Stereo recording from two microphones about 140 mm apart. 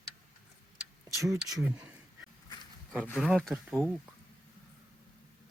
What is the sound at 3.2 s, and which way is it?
Speech, centre (ahead or behind).